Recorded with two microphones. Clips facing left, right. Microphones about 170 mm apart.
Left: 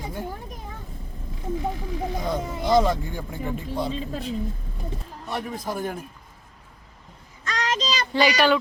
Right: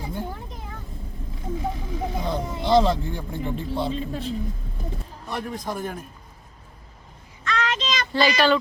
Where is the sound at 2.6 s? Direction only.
25° right (ahead or behind).